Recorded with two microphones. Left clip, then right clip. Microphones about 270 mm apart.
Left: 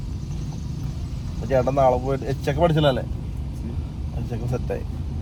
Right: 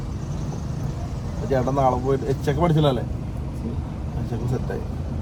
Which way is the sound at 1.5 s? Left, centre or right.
Left.